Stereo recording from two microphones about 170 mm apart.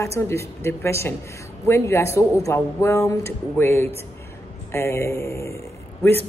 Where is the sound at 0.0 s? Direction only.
15° left (ahead or behind).